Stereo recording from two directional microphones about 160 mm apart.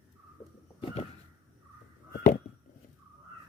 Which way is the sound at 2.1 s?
60° left (ahead or behind).